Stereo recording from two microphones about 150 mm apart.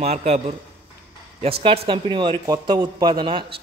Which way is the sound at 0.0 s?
45° right (ahead or behind).